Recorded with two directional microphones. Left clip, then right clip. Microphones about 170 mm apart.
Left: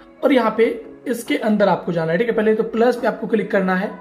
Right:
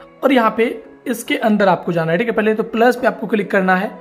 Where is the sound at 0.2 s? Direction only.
30° right (ahead or behind).